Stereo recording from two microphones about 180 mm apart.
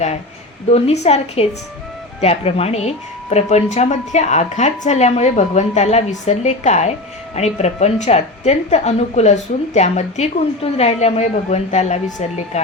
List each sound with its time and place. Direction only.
0.7 s speech: 35° left (ahead or behind)